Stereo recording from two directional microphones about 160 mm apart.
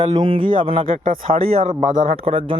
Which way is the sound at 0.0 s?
25° right (ahead or behind).